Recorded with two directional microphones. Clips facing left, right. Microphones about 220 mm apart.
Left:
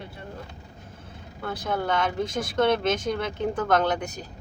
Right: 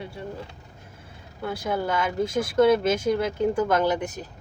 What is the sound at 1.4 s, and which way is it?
Speech, 10° right (ahead or behind).